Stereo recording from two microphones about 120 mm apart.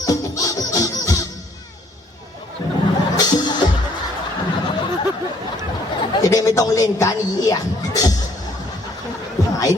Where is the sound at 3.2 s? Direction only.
35° left (ahead or behind).